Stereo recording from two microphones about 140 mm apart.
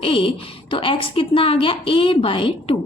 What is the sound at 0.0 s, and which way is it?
A woman's voice, 40° left (ahead or behind).